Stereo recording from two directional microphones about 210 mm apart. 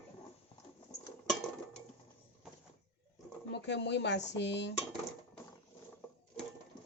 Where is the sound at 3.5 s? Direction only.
55° left (ahead or behind).